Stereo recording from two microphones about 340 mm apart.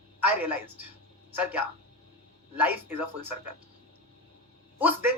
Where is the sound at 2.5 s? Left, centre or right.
Centre.